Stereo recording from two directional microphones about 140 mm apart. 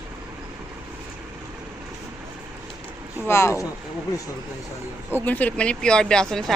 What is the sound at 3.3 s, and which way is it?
Speech, 20° left (ahead or behind).